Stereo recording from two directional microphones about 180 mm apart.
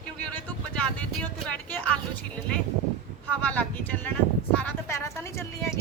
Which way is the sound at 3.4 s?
10° left (ahead or behind).